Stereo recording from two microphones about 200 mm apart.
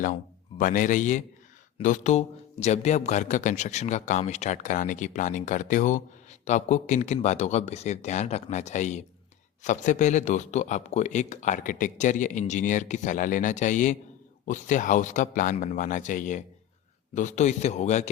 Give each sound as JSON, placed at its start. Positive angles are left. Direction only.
{"t": 0.6, "sound": "speech", "side_deg": 40}